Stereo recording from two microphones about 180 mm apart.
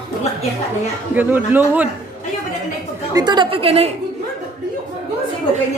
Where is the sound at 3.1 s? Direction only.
25° right (ahead or behind).